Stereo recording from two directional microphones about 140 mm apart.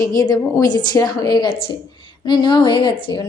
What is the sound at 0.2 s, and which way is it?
A woman's voice, 25° left (ahead or behind).